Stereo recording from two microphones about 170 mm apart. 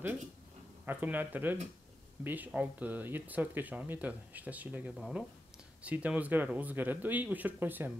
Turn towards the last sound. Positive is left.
turn(degrees=-10)  # may be behind; listen again after turning